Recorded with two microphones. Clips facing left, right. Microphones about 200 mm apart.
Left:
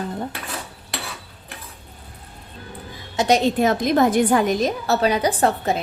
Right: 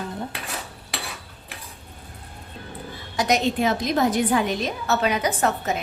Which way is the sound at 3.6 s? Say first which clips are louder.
Left 4 dB; 50° left (ahead or behind).